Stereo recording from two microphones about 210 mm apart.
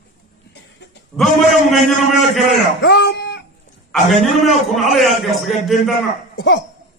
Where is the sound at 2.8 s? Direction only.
55° left (ahead or behind).